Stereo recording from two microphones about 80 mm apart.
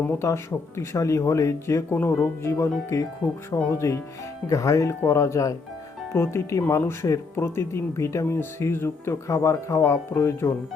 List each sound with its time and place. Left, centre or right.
0.1 s speech: left